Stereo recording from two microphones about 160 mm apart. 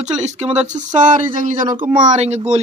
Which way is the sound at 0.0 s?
45° right (ahead or behind).